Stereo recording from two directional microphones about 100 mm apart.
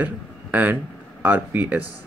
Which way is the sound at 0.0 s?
15° right (ahead or behind).